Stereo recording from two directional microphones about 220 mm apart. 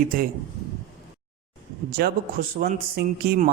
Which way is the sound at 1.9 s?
40° right (ahead or behind).